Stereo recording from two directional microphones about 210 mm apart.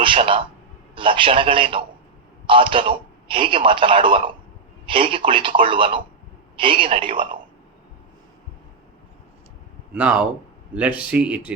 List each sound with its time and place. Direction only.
0.0 s speech: 25° right (ahead or behind)
9.9 s speech: 5° right (ahead or behind)